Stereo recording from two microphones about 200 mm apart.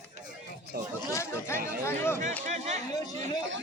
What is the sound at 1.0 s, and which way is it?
Speech, 15° left (ahead or behind).